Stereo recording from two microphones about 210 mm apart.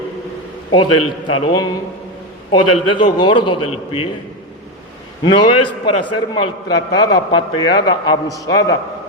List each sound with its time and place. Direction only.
0.7 s a man's voice: 25° left (ahead or behind)
5.2 s a man's voice: 25° left (ahead or behind)